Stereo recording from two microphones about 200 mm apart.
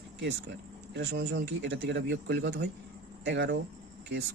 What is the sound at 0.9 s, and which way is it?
Speech, 60° right (ahead or behind).